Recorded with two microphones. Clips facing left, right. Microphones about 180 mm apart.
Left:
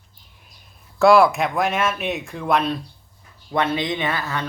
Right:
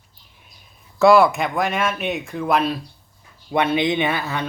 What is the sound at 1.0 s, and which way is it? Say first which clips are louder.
Speech: even; centre (ahead or behind).